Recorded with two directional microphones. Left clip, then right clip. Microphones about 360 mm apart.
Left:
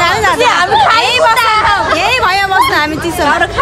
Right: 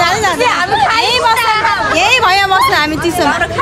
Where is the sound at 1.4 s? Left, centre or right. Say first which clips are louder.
Left 2 dB; centre.